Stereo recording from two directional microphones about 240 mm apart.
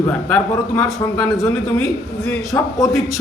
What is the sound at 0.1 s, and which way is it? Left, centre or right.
A man's voice, centre.